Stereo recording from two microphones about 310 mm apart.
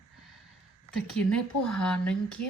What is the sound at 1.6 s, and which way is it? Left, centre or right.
Speech, centre.